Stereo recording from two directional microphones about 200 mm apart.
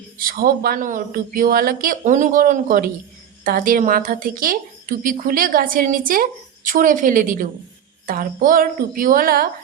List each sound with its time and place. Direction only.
0.2 s a woman's voice: 45° right (ahead or behind)